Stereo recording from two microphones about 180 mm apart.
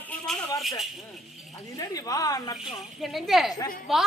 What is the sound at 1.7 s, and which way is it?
Speech, 20° left (ahead or behind).